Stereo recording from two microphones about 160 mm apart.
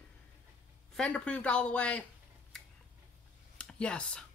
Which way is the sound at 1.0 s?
5° left (ahead or behind).